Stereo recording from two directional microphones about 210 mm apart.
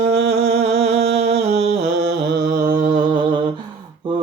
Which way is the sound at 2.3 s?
45° right (ahead or behind).